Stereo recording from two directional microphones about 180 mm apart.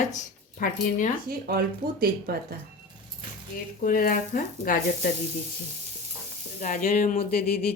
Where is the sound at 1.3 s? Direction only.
55° right (ahead or behind).